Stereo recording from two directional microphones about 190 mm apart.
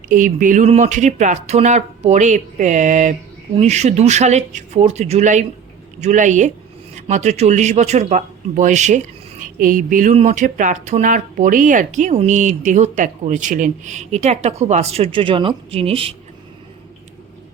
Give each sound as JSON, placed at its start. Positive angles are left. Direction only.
{"t": 0.1, "sound": "a man's voice", "side_deg": -45}